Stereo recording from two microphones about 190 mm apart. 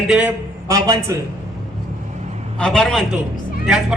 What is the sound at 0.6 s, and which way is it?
Speech, 15° right (ahead or behind).